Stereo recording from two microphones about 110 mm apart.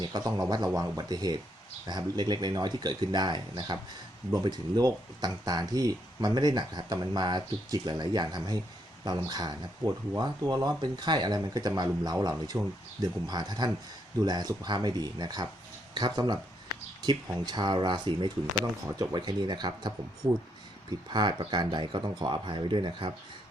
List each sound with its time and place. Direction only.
0.0 s speech: 35° right (ahead or behind)
21.1 s speech: 45° right (ahead or behind)